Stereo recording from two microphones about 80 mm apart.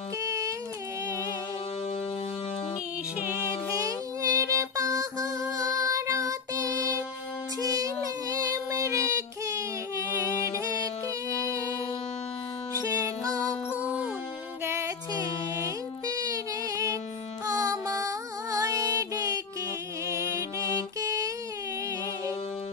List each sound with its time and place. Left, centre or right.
0.2 s music: right
4.2 s female singing: right
5.9 s child singing: right
10.8 s music: right
12.9 s music: right
13.7 s music: centre
14.6 s music: right
16.1 s music: right